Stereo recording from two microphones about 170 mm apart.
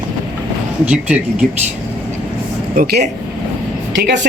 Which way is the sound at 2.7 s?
60° right (ahead or behind).